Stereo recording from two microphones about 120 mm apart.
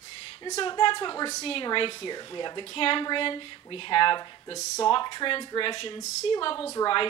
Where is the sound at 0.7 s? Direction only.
40° left (ahead or behind).